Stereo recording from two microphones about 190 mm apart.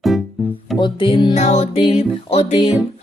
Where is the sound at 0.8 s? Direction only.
25° left (ahead or behind).